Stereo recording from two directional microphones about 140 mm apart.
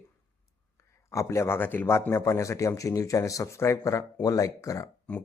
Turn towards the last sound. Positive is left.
turn(degrees=25)  # may be behind; listen again after turning